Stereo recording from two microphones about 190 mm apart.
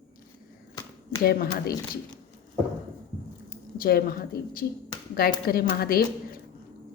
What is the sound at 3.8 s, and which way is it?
A woman's voice, 50° left (ahead or behind).